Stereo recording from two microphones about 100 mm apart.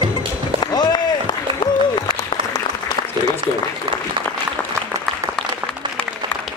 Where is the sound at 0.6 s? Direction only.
45° left (ahead or behind).